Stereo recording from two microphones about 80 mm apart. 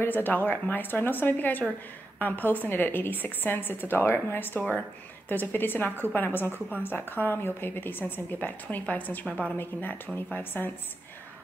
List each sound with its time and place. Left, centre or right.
0.0 s a woman's voice: left